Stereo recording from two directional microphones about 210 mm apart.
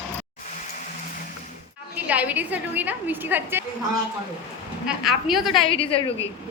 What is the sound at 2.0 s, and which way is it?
A woman's voice, 5° right (ahead or behind).